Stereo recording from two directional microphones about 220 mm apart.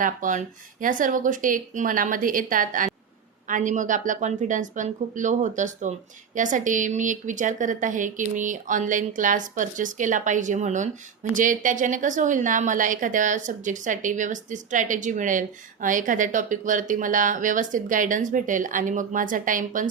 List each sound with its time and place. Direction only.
0.0 s a woman's voice: 35° right (ahead or behind)